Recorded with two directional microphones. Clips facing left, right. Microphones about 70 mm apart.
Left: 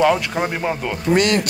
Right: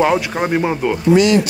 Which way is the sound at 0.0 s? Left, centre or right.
Centre.